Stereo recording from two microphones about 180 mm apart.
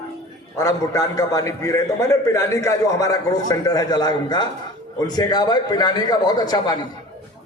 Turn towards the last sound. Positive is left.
turn(degrees=20)  # may be behind; listen again after turning